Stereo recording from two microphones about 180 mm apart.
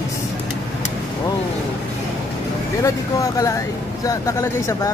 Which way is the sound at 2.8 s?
20° left (ahead or behind).